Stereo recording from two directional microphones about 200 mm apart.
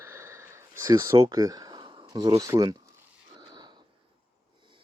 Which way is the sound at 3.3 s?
20° right (ahead or behind).